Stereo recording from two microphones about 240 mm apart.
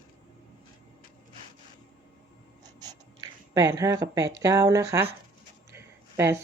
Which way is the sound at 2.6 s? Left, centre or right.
Centre.